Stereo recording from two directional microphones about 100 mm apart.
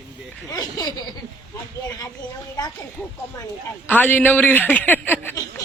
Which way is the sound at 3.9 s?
20° left (ahead or behind).